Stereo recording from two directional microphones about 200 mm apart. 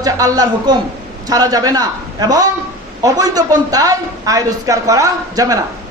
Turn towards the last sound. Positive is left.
turn(degrees=-15)  # may be behind; listen again after turning